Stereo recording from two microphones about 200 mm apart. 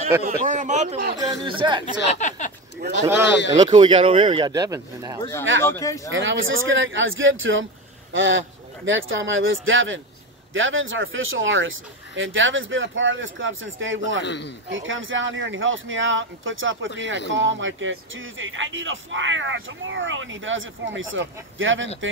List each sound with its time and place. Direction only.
0.2 s speech: 40° right (ahead or behind)
1.1 s speech: 20° right (ahead or behind)
2.0 s a sound: 35° left (ahead or behind)
2.8 s speech: 45° right (ahead or behind)
3.5 s speech: 25° right (ahead or behind)
5.6 s speech: 15° left (ahead or behind)
6.0 s speech: 70° right (ahead or behind)
14.2 s a man's voice: 60° left (ahead or behind)
14.7 s speech: 75° right (ahead or behind)